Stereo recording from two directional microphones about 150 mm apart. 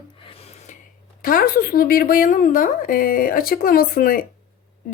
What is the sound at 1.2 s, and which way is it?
Speech, 75° left (ahead or behind).